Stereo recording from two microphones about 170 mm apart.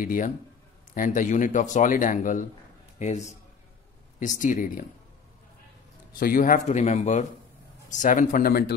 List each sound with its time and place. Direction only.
0.0 s speech: 50° left (ahead or behind)
6.1 s speech: 55° left (ahead or behind)